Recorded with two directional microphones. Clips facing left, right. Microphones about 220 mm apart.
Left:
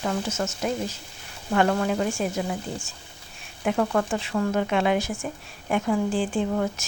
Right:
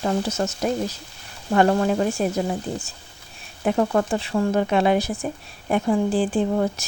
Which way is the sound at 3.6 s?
30° right (ahead or behind).